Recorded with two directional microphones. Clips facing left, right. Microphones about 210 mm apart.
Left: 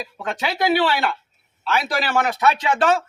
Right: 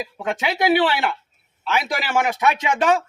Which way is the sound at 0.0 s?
15° right (ahead or behind).